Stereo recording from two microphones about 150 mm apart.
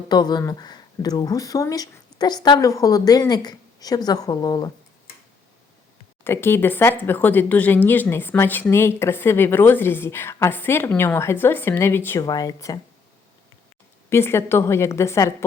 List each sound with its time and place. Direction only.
0.1 s speech: 25° left (ahead or behind)
6.2 s a woman's voice: 15° left (ahead or behind)
14.1 s a woman's voice: 15° left (ahead or behind)